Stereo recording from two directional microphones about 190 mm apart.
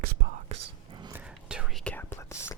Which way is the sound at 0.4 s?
35° right (ahead or behind).